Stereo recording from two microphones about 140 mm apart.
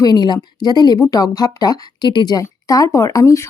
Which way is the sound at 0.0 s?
30° left (ahead or behind).